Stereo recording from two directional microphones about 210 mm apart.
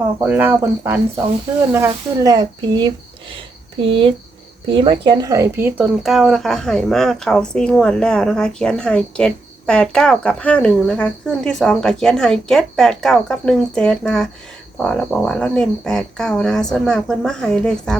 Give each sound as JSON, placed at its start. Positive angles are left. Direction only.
{"t": 0.2, "sound": "speech", "side_deg": -5}